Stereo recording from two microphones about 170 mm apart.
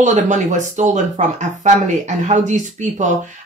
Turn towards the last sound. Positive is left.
turn(degrees=-45)  # may be behind; listen again after turning